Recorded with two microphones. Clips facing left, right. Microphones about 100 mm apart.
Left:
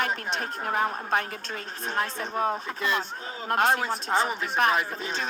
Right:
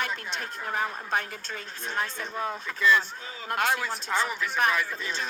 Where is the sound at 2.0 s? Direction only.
35° left (ahead or behind).